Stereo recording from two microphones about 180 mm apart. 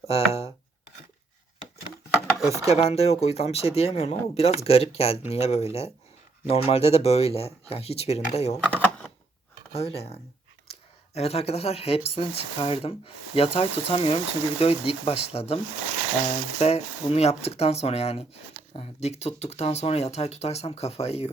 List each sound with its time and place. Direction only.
0.1 s speech: 35° left (ahead or behind)
2.0 s a sound: centre (ahead or behind)
2.6 s speech: 35° left (ahead or behind)
8.7 s typewriter: 10° left (ahead or behind)
9.7 s speech: 35° left (ahead or behind)